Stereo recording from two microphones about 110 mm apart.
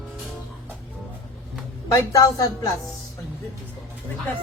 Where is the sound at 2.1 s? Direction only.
35° left (ahead or behind).